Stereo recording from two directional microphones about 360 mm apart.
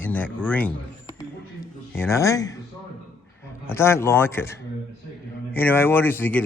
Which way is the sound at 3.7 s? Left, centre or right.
Centre.